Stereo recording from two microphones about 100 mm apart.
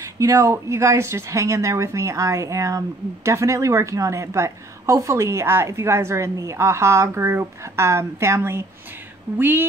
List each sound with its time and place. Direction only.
0.0 s a woman's voice: 35° right (ahead or behind); by 9.7 s 20° right (ahead or behind)